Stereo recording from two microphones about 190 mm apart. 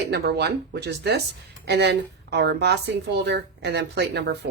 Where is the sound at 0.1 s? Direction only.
60° right (ahead or behind).